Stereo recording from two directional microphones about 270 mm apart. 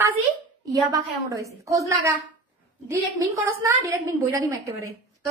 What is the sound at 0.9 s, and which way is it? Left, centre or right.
A woman's voice, centre.